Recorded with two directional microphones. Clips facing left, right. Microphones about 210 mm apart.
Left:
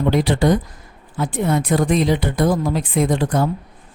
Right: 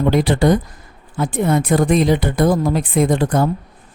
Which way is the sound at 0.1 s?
50° right (ahead or behind).